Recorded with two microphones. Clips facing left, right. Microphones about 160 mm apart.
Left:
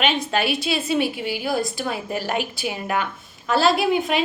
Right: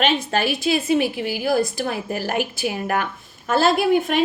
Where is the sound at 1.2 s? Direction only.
50° right (ahead or behind).